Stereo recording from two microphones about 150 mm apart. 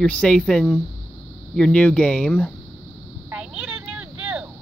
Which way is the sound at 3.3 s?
5° right (ahead or behind).